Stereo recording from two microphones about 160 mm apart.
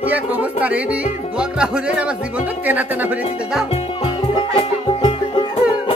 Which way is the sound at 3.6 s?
40° left (ahead or behind).